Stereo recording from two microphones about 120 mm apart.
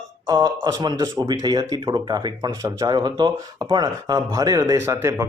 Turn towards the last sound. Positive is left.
turn(degrees=-25)  # may be behind; listen again after turning